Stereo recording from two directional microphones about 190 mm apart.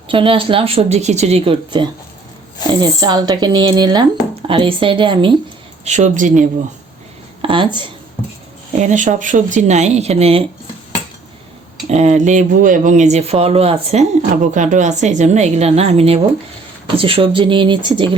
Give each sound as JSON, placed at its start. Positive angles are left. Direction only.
{"t": 0.1, "sound": "speech", "side_deg": -30}
{"t": 5.8, "sound": "speech", "side_deg": -35}
{"t": 7.4, "sound": "speech", "side_deg": -25}
{"t": 8.8, "sound": "speech", "side_deg": -40}
{"t": 11.9, "sound": "speech", "side_deg": -35}